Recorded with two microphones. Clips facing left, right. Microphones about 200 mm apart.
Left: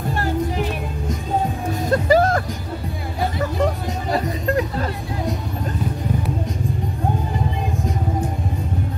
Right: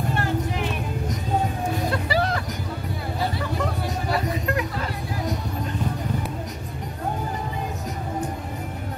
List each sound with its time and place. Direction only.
1.9 s music: 45° left (ahead or behind)
4.1 s music: 30° left (ahead or behind)